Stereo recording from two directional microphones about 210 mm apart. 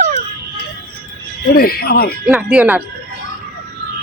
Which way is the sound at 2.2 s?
5° right (ahead or behind).